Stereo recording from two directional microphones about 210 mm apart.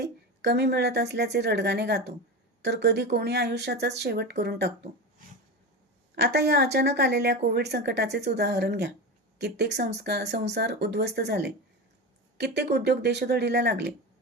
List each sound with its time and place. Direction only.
0.0 s speech: 55° right (ahead or behind)
6.1 s speech: 50° right (ahead or behind)